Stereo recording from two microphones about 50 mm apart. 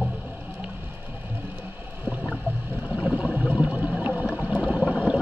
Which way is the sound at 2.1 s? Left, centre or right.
Right.